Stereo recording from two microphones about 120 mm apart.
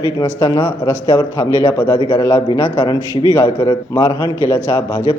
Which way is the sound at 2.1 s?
25° left (ahead or behind).